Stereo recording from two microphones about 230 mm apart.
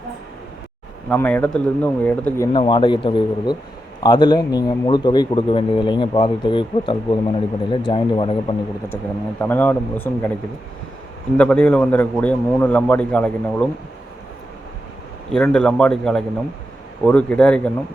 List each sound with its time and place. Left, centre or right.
1.1 s speech: centre
2.5 s a man's voice: left
9.4 s speech: centre
11.3 s a man's voice: centre
15.3 s a man's voice: centre